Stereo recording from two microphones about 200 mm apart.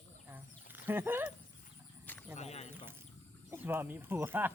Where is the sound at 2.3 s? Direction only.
35° left (ahead or behind).